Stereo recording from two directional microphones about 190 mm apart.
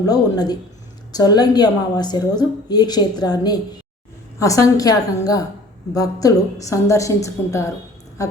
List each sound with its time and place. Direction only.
0.1 s a woman's voice: 20° left (ahead or behind)